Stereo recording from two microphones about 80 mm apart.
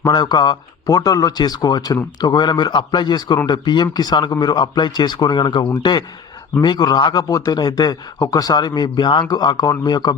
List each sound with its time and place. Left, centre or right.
0.0 s speech: left